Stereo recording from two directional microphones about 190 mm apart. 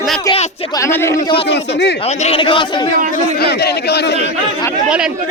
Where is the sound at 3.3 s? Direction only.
55° left (ahead or behind).